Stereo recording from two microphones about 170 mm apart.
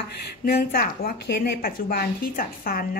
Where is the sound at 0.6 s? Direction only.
60° left (ahead or behind).